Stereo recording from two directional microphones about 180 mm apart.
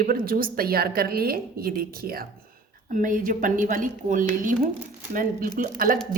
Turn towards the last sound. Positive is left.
turn(degrees=-50)  # may be behind; listen again after turning